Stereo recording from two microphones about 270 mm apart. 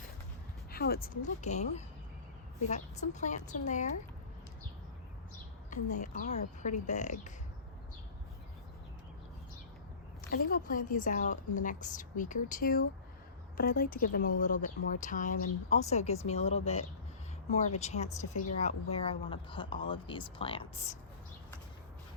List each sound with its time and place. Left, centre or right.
0.7 s speech: left
5.7 s speech: left
10.3 s speech: left
17.7 s speech: left